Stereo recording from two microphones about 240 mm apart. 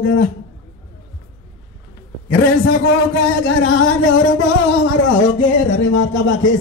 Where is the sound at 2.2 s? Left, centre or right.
Left.